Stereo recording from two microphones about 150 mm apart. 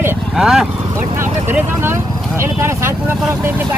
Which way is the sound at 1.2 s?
15° right (ahead or behind).